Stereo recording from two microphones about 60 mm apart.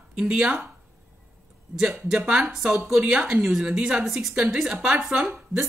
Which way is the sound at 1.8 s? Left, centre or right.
Centre.